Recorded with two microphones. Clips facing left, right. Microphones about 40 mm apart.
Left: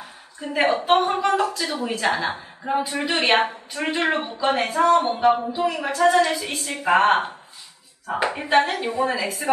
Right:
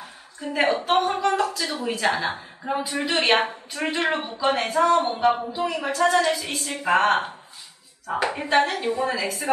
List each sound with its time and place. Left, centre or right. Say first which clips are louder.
0.4 s a woman's voice: left 1 dB; centre